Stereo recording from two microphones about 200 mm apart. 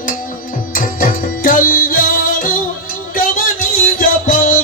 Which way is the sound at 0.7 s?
45° left (ahead or behind).